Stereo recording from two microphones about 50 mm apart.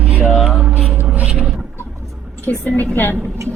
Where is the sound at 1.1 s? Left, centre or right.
Right.